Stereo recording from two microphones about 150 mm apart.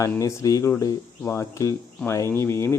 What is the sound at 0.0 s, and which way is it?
Speech, 20° left (ahead or behind).